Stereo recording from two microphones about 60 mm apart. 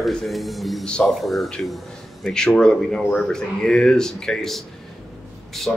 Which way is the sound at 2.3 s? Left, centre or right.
Centre.